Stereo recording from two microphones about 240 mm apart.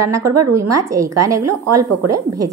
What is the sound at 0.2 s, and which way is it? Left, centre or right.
Speech, right.